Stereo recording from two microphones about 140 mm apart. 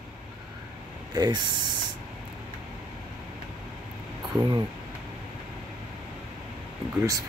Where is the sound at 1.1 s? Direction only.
30° right (ahead or behind).